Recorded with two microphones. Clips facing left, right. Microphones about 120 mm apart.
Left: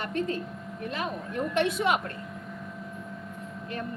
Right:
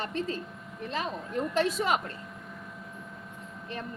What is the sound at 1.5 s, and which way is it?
Speech, 35° right (ahead or behind).